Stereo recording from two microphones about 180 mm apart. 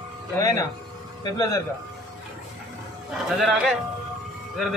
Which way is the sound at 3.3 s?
Centre (ahead or behind).